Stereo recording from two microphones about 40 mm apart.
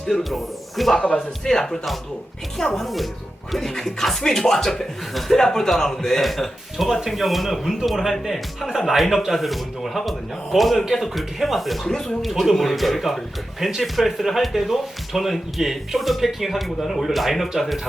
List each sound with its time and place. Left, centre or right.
0.1 s speech: centre
0.9 s speech: left
1.5 s a man's voice: centre
11.9 s a man's voice: centre
12.2 s speech: centre